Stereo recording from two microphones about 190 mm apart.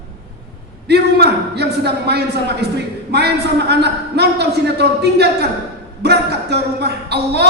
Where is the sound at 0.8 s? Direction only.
60° right (ahead or behind).